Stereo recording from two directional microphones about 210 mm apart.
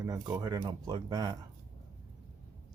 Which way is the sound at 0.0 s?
15° right (ahead or behind).